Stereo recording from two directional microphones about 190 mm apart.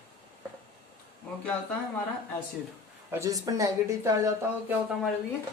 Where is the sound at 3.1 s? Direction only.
15° right (ahead or behind).